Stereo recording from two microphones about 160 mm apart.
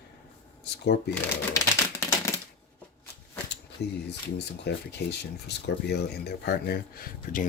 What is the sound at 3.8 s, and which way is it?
Speech, 90° left.